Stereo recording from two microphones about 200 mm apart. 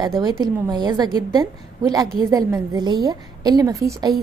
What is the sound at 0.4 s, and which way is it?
A woman's voice, 20° right (ahead or behind).